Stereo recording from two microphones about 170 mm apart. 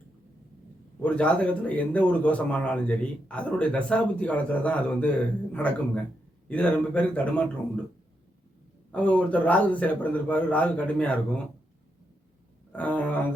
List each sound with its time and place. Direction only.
1.0 s a man's voice: 5° left (ahead or behind)
8.9 s a man's voice: 5° left (ahead or behind)
12.7 s a man's voice: 10° left (ahead or behind)